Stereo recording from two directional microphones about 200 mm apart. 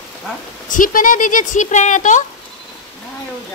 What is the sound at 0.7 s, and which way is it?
Speech, 40° left (ahead or behind).